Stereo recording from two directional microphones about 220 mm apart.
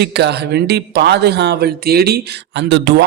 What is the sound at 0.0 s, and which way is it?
A man's voice, 50° right (ahead or behind).